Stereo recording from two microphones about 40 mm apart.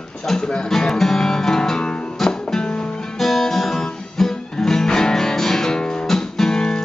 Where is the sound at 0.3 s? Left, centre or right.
Centre.